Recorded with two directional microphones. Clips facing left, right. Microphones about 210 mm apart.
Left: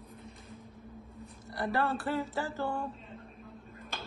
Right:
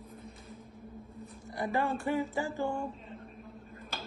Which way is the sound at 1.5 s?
10° right (ahead or behind).